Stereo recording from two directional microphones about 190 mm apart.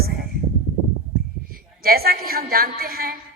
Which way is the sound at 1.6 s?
50° right (ahead or behind).